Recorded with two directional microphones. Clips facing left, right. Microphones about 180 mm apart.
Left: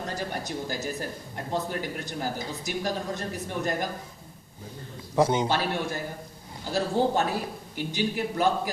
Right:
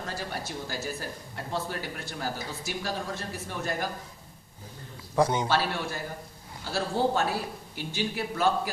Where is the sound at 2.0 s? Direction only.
20° left (ahead or behind).